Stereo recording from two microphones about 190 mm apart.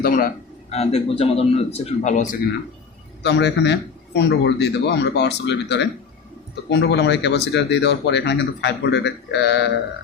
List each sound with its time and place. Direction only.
0.0 s a man's voice: 45° left (ahead or behind)
0.7 s a man's voice: 35° left (ahead or behind)
3.2 s speech: 65° left (ahead or behind)